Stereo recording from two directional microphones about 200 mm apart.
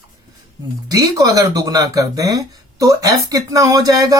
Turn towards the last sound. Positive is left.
turn(degrees=-20)  # may be behind; listen again after turning